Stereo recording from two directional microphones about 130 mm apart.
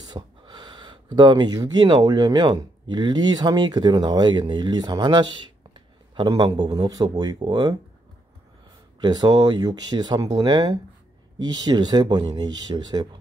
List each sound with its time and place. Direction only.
0.1 s speech: 35° right (ahead or behind)
9.0 s speech: 35° right (ahead or behind)